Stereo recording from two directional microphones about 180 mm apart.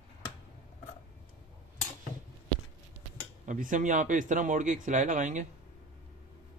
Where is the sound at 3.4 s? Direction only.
45° right (ahead or behind).